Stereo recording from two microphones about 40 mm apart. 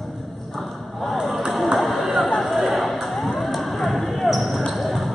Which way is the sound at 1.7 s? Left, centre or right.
Centre.